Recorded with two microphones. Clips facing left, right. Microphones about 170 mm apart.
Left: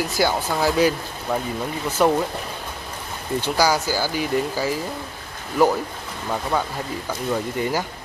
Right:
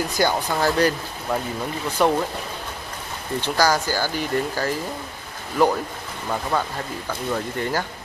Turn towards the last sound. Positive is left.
turn(degrees=10)  # may be behind; listen again after turning